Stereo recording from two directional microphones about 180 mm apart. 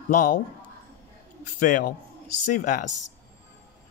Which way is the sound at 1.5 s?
45° left (ahead or behind).